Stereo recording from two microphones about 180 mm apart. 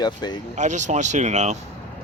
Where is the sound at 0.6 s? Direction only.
40° right (ahead or behind).